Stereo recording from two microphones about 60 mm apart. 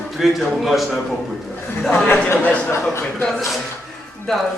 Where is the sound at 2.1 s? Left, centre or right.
Left.